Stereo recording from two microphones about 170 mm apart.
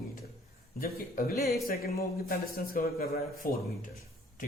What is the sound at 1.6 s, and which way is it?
Speech, 60° left (ahead or behind).